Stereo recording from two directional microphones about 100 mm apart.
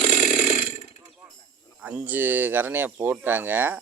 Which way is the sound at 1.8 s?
15° right (ahead or behind).